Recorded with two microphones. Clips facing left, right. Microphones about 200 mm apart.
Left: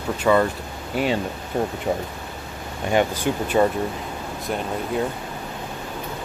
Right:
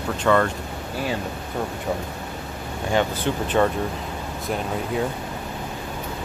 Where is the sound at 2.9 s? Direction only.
10° left (ahead or behind).